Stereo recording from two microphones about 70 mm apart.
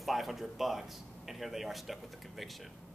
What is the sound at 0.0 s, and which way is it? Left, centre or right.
A man's voice, centre.